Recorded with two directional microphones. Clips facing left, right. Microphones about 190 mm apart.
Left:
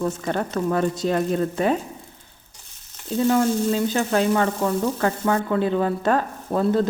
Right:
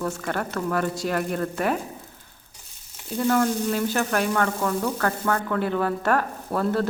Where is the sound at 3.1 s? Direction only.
15° left (ahead or behind).